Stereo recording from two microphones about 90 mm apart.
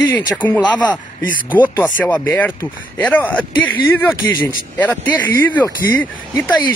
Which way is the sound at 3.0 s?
15° left (ahead or behind).